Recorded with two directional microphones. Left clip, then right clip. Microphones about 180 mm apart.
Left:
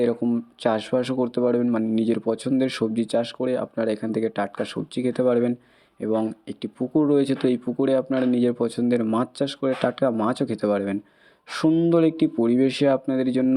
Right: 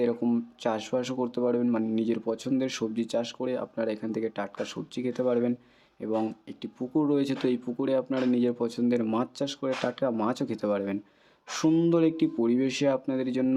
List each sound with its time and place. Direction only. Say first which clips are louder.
0.0 s speech: left 4 dB; 20° left (ahead or behind)